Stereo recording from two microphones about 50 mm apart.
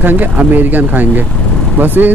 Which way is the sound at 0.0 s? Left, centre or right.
Right.